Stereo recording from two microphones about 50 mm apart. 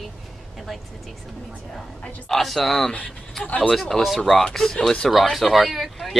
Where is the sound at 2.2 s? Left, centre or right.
Centre.